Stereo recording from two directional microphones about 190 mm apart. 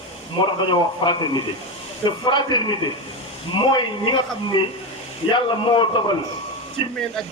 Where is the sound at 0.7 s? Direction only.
25° left (ahead or behind).